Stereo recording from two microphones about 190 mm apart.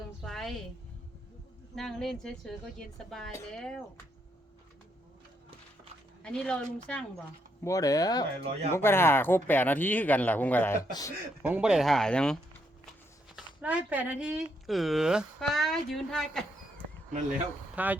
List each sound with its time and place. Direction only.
0.2 s a sound: centre (ahead or behind)
1.7 s speech: centre (ahead or behind)
6.2 s speech: 5° left (ahead or behind)
7.6 s speech: 15° left (ahead or behind)
11.4 s speech: 5° right (ahead or behind)
17.8 s speech: 5° right (ahead or behind)